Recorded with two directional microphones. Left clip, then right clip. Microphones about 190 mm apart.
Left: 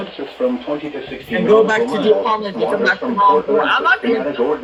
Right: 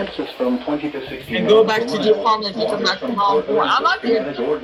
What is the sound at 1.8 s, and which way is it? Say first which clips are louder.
Speech: left 2 dB; 45° right (ahead or behind).